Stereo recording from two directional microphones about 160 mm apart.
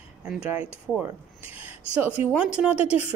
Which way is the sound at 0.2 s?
10° right (ahead or behind).